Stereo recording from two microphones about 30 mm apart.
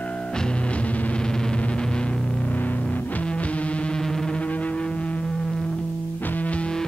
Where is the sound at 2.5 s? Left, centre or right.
Left.